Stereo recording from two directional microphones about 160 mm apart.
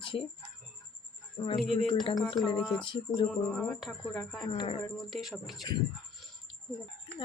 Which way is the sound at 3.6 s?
5° left (ahead or behind).